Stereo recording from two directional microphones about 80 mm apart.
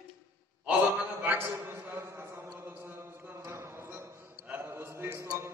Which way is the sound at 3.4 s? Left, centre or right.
Right.